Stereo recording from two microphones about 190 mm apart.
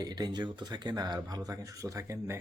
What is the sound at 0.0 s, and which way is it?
Speech, 20° right (ahead or behind).